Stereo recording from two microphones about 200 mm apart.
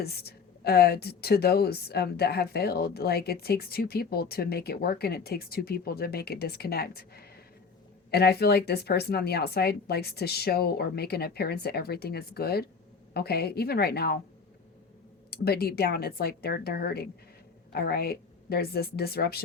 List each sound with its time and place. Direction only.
0.0 s a woman's voice: 50° left (ahead or behind)
15.3 s a woman's voice: 50° left (ahead or behind)